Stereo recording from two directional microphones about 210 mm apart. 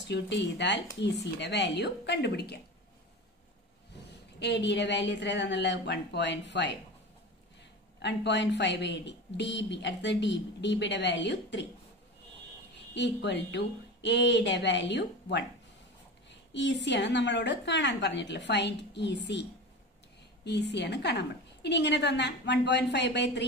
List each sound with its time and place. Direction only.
0.1 s a woman's voice: 55° left (ahead or behind)
4.4 s a woman's voice: 55° left (ahead or behind)
8.0 s a woman's voice: 55° left (ahead or behind)
12.9 s a woman's voice: 55° left (ahead or behind)
20.4 s a woman's voice: 55° left (ahead or behind)